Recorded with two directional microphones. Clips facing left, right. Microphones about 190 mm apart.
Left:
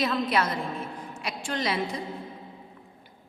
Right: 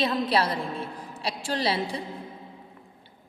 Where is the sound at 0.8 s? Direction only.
30° right (ahead or behind).